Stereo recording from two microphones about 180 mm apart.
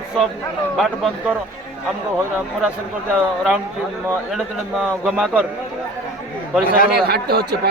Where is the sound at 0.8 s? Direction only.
Centre (ahead or behind).